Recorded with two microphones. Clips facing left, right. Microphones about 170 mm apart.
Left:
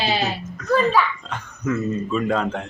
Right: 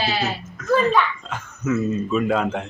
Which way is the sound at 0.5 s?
Centre (ahead or behind).